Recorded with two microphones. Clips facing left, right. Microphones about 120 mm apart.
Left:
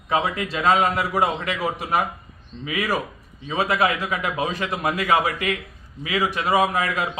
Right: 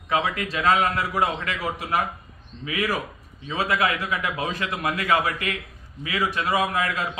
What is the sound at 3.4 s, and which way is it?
A man's voice, 20° left (ahead or behind).